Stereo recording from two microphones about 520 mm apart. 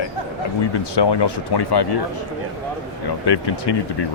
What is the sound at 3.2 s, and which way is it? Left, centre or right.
Speech, left.